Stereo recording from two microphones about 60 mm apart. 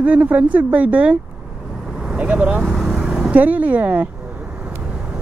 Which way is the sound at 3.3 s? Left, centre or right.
Right.